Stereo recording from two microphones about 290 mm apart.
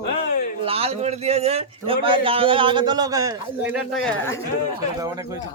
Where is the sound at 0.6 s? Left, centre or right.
Centre.